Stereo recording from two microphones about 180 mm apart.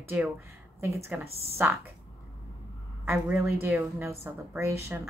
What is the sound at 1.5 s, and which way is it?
Speech, 10° right (ahead or behind).